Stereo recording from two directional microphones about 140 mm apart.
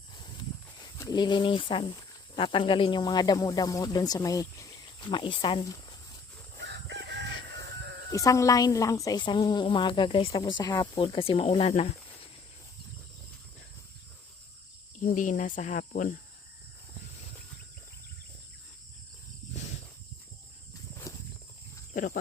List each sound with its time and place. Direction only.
0.8 s speech: 25° left (ahead or behind)
4.9 s a woman's voice: 35° left (ahead or behind)
8.1 s a woman's voice: 20° left (ahead or behind); by 12.3 s 45° left (ahead or behind)
15.0 s cricket: 65° left (ahead or behind)
21.9 s speech: 70° left (ahead or behind)